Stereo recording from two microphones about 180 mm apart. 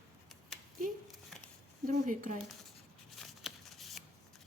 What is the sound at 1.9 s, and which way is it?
Speech, 45° right (ahead or behind).